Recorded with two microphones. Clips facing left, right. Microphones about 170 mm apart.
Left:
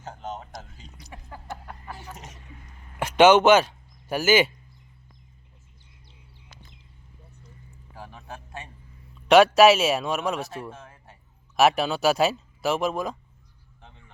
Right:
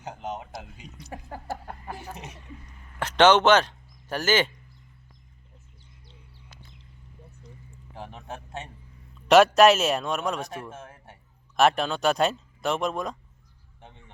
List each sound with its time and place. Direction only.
0.0 s speech: 15° right (ahead or behind)
1.1 s a sound: 45° right (ahead or behind)
3.0 s speech: 10° left (ahead or behind)
7.9 s a sound: 25° right (ahead or behind)
9.2 s speech: centre (ahead or behind)
10.7 s speech: 25° right (ahead or behind)
11.5 s speech: 5° left (ahead or behind)